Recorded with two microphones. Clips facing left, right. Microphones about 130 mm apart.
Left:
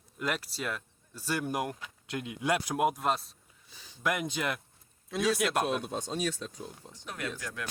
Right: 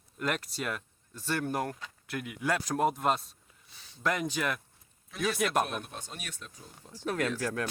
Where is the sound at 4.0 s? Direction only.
10° left (ahead or behind).